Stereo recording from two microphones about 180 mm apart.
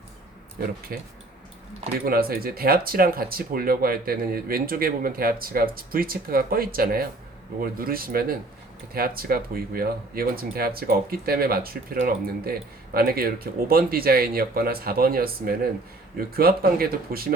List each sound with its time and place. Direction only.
0.9 s speech: 55° right (ahead or behind)